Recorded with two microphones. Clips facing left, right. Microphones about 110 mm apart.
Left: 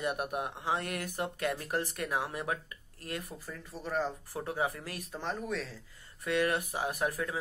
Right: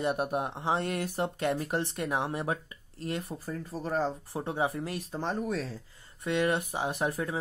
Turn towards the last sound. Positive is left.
turn(degrees=-25)  # may be behind; listen again after turning